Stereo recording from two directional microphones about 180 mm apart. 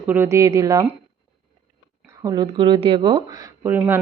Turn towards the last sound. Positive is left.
turn(degrees=-10)  # may be behind; listen again after turning